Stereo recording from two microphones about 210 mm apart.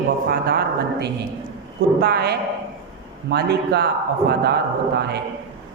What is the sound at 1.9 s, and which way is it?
A woman's voice, 50° right (ahead or behind).